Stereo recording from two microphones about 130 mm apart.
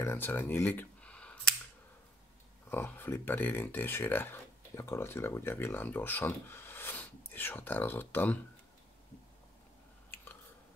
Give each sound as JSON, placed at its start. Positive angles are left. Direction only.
{"t": 0.0, "sound": "speech", "side_deg": 15}
{"t": 2.7, "sound": "speech", "side_deg": 15}